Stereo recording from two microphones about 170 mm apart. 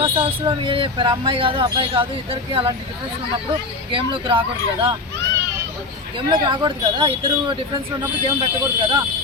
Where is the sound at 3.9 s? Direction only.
30° right (ahead or behind).